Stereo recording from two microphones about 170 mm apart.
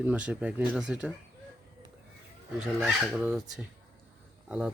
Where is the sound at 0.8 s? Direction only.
5° right (ahead or behind).